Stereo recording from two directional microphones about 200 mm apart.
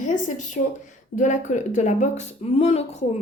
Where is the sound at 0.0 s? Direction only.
40° left (ahead or behind).